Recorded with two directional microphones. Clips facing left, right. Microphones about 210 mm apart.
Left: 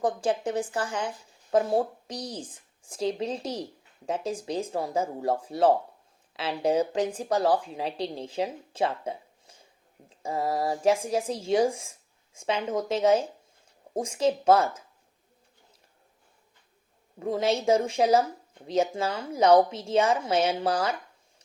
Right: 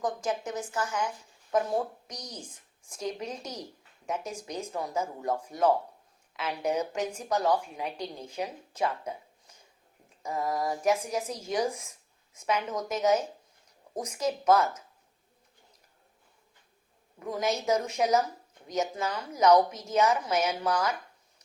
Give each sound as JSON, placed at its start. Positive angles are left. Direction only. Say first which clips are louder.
{"t": 0.0, "sound": "a woman's voice", "louder": "left 5 dB", "side_deg": 30}
{"t": 8.7, "sound": "a sound", "louder": "left 3 dB", "side_deg": 30}
{"t": 10.1, "sound": "speech", "louder": "left 3 dB", "side_deg": 30}
{"t": 17.2, "sound": "speech", "louder": "left 4 dB", "side_deg": 30}